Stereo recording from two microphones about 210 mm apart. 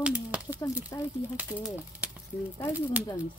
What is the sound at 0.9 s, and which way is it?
Speech, 15° left (ahead or behind).